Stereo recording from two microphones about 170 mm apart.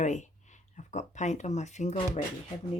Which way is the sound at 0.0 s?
45° left (ahead or behind).